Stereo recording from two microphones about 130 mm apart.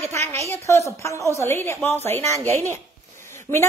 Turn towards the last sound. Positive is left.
turn(degrees=20)  # may be behind; listen again after turning